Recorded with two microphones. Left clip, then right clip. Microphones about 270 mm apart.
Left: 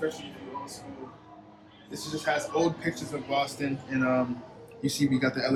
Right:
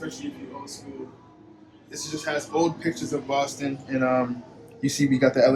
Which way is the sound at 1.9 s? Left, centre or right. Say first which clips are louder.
Even; centre.